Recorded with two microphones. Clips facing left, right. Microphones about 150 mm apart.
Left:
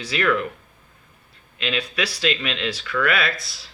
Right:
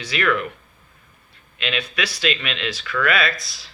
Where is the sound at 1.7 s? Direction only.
30° left (ahead or behind).